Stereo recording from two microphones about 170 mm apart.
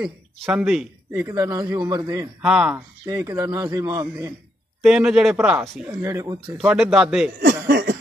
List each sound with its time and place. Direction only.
0.0 s speech: 5° right (ahead or behind)
1.1 s a man's voice: 20° right (ahead or behind)
2.4 s speech: 5° right (ahead or behind)
2.7 s a man's voice: 20° right (ahead or behind)
4.8 s speech: 5° right (ahead or behind); by 6.5 s 25° right (ahead or behind)
6.6 s speech: 5° right (ahead or behind)
7.3 s chuckle: 60° right (ahead or behind); by 8.0 s 90° right